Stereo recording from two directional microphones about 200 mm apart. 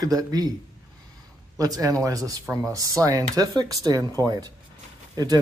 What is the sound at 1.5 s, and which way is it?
Speech, 15° right (ahead or behind).